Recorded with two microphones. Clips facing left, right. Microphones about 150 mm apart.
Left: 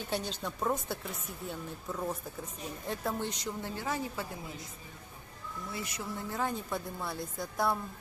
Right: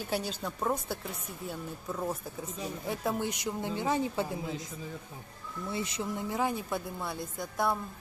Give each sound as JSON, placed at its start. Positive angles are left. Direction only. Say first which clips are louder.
{"t": 0.0, "sound": "a woman's voice", "louder": "right 2 dB", "side_deg": -5}
{"t": 5.7, "sound": "a woman's voice", "louder": "right 6 dB", "side_deg": -25}